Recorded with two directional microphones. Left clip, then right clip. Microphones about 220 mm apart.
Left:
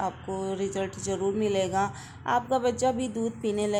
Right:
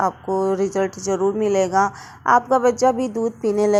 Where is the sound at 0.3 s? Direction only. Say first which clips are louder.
Right 11 dB; 5° right (ahead or behind).